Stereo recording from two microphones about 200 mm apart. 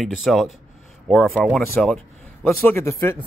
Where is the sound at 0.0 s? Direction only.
Centre (ahead or behind).